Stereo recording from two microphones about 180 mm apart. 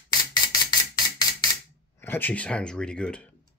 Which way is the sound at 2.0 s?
10° left (ahead or behind).